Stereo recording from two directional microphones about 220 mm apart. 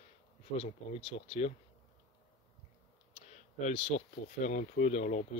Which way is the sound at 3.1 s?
30° left (ahead or behind).